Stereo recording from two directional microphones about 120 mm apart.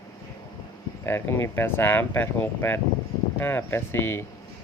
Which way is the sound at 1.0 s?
20° left (ahead or behind).